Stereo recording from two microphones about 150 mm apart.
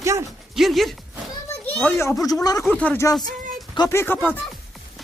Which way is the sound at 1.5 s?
10° left (ahead or behind).